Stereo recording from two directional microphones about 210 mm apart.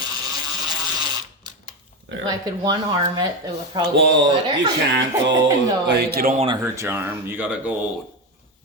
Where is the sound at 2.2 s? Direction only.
20° right (ahead or behind).